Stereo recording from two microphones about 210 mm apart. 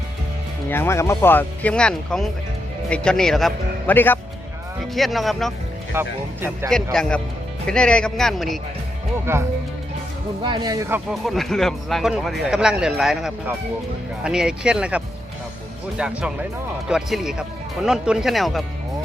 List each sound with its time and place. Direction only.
0.7 s speech: 10° left (ahead or behind)
5.9 s speech: 10° right (ahead or behind)
6.9 s speech: centre (ahead or behind)
9.3 s speech: 10° right (ahead or behind)
11.1 s speech: centre (ahead or behind)